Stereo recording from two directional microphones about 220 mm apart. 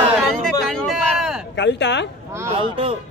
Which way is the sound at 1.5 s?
50° left (ahead or behind).